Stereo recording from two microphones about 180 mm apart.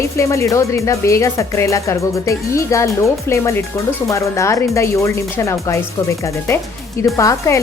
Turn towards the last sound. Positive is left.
turn(degrees=15)  # may be behind; listen again after turning